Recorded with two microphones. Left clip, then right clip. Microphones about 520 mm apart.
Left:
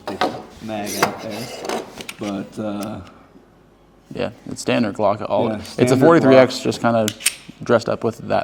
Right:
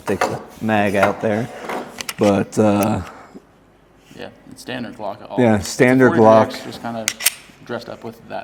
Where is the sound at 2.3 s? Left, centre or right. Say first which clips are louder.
Right 11 dB; right.